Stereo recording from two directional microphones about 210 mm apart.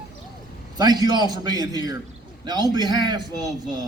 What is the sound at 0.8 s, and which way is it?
A man's voice, 20° right (ahead or behind).